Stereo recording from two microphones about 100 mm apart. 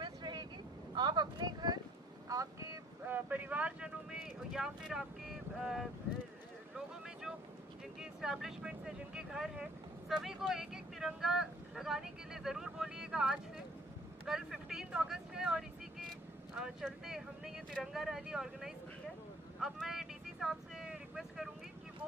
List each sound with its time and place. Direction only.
0.0 s vehicle: 50° right (ahead or behind)
0.9 s a sound: 50° right (ahead or behind)
3.1 s speech: 20° right (ahead or behind)
8.0 s speech: 5° right (ahead or behind)
16.8 s speech: 5° right (ahead or behind)
19.6 s vehicle: 5° right (ahead or behind)